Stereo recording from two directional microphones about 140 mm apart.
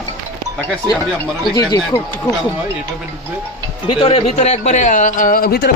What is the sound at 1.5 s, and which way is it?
Speech, 30° left (ahead or behind).